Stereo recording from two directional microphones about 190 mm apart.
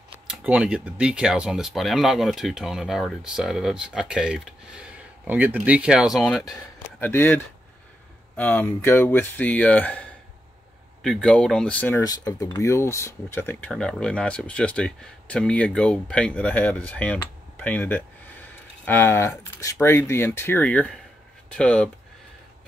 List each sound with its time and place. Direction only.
0.3 s speech: 5° right (ahead or behind); by 7.2 s 10° left (ahead or behind)
8.4 s speech: 5° left (ahead or behind)